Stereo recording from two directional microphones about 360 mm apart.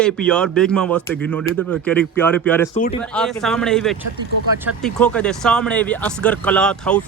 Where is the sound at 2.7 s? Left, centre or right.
Centre.